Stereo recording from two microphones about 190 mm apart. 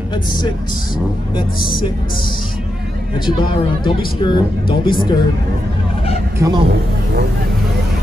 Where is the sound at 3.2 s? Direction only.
25° left (ahead or behind).